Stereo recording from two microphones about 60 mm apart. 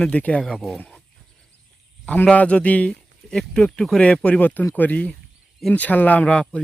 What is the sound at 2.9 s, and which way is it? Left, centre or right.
Speech, centre.